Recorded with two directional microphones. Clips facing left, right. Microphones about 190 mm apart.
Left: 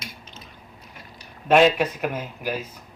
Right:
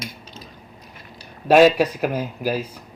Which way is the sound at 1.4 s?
35° right (ahead or behind).